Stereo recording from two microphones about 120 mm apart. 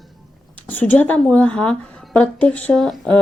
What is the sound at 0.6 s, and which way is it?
A woman's voice, 15° left (ahead or behind).